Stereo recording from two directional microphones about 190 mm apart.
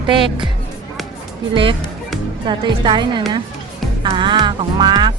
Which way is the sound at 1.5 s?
25° right (ahead or behind).